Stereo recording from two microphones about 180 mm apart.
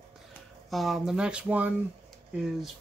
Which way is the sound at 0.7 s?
Centre (ahead or behind).